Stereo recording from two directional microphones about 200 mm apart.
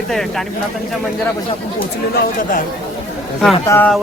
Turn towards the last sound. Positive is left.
turn(degrees=10)  # may be behind; listen again after turning